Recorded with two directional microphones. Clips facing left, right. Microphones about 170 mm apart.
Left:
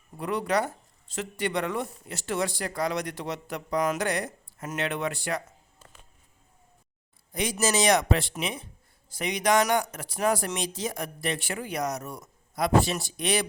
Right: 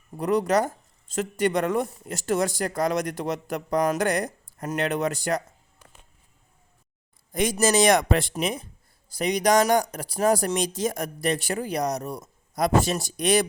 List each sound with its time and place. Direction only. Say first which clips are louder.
0.2 s speech: right 5 dB; 40° right (ahead or behind)
7.3 s speech: right 5 dB; 50° right (ahead or behind)